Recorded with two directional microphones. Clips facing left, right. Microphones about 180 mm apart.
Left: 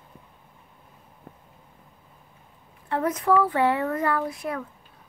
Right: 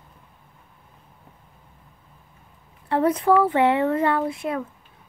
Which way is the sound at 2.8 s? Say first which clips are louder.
Right 4 dB; 30° right (ahead or behind).